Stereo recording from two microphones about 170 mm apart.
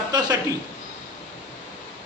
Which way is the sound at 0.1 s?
25° right (ahead or behind).